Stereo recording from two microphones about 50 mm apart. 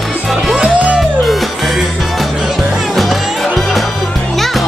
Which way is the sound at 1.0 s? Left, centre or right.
Centre.